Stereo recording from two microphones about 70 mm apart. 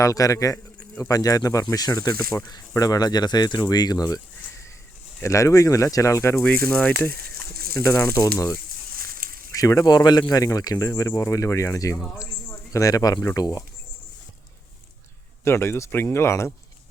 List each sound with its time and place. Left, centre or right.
0.0 s speech: left
5.2 s speech: left
6.3 s speech: centre
7.8 s speech: left
9.6 s speech: left
9.9 s speech: left
12.7 s speech: left
15.4 s speech: left